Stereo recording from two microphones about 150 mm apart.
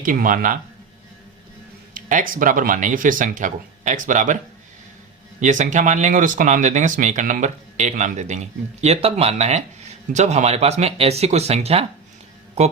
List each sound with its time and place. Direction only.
0.0 s speech: 65° right (ahead or behind)
1.9 s speech: 65° right (ahead or behind)
5.4 s speech: 55° right (ahead or behind)